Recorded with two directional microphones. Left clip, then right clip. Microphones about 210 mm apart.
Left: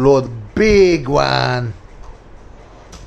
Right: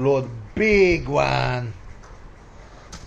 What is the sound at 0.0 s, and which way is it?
Speech, 35° left (ahead or behind).